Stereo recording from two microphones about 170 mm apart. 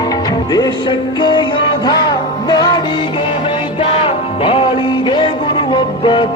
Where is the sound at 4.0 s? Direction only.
30° left (ahead or behind).